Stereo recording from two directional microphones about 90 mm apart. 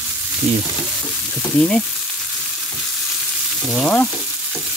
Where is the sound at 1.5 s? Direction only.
10° left (ahead or behind).